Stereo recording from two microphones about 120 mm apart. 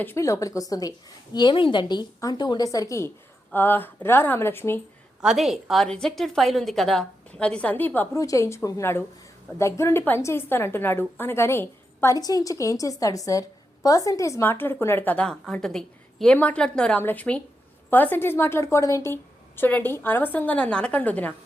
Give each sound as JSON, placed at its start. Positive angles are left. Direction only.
{"t": 0.0, "sound": "a woman's voice", "side_deg": 20}
{"t": 3.5, "sound": "a woman's voice", "side_deg": 15}
{"t": 5.2, "sound": "a woman's voice", "side_deg": 0}
{"t": 8.1, "sound": "a woman's voice", "side_deg": 25}
{"t": 12.1, "sound": "a woman's voice", "side_deg": 30}